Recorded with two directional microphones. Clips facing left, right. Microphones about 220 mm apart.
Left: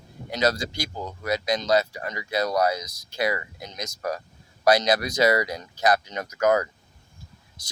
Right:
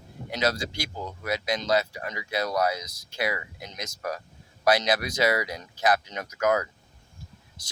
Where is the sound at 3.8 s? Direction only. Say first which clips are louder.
Left 3 dB; 5° right (ahead or behind).